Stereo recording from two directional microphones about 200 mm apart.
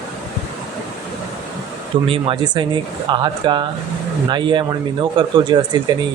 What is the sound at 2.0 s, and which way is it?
Speech, 25° right (ahead or behind).